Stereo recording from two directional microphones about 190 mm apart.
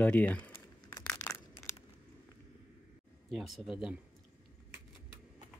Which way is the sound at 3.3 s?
Centre (ahead or behind).